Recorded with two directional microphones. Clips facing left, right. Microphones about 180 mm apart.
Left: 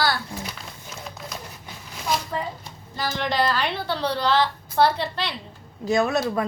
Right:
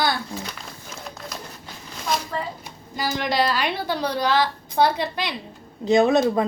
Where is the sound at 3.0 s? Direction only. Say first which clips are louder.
Right 1 dB; 10° right (ahead or behind).